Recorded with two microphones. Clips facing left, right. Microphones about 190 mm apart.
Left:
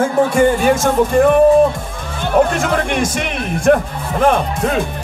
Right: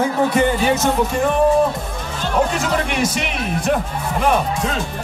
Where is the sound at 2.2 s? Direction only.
55° left (ahead or behind).